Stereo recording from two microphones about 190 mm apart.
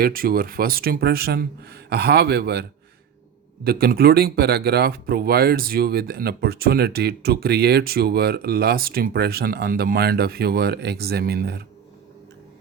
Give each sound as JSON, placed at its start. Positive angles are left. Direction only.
{"t": 0.0, "sound": "speech", "side_deg": -50}